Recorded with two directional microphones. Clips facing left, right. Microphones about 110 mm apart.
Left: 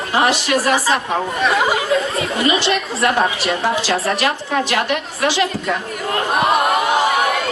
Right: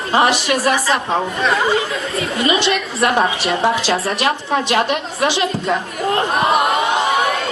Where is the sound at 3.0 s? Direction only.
25° right (ahead or behind).